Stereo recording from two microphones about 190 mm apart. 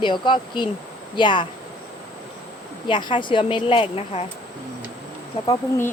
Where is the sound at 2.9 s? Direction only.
25° left (ahead or behind).